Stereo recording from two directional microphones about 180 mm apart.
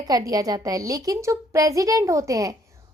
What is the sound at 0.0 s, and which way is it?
A woman's voice, 20° right (ahead or behind).